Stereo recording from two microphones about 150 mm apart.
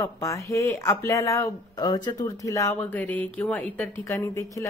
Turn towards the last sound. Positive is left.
turn(degrees=20)  # may be behind; listen again after turning